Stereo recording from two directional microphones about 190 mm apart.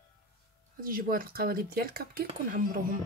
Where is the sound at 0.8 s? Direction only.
50° right (ahead or behind).